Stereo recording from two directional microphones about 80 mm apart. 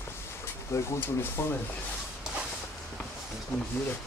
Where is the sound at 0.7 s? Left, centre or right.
Left.